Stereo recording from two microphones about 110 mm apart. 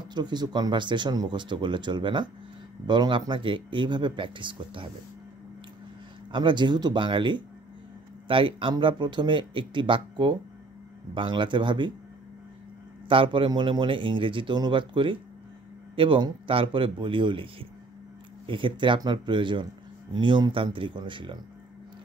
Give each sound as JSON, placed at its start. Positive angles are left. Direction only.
{"t": 0.1, "sound": "a man's voice", "side_deg": -40}
{"t": 6.3, "sound": "a man's voice", "side_deg": -45}
{"t": 13.1, "sound": "a man's voice", "side_deg": -50}